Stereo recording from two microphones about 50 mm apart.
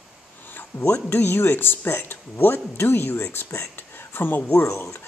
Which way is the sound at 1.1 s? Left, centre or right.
Left.